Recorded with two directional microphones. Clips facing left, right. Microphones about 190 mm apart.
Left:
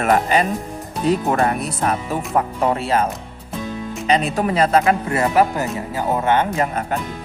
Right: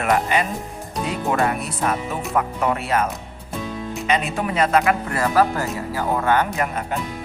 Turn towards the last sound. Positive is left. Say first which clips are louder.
# left 2 dB
turn(degrees=25)  # may be behind; listen again after turning